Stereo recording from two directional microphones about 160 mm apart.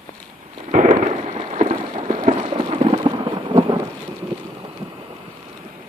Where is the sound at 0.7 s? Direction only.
55° right (ahead or behind).